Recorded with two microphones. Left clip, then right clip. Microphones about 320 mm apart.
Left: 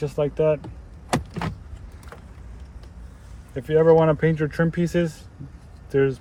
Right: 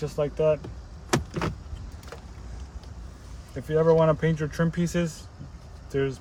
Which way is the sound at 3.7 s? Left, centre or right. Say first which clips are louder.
Left 4 dB; centre.